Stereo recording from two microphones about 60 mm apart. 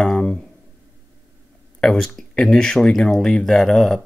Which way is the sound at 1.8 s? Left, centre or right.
Centre.